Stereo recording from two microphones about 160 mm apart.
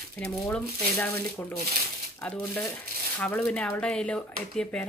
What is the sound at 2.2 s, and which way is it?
Speech, 10° left (ahead or behind).